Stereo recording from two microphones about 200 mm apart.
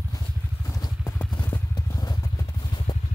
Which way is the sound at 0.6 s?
15° left (ahead or behind).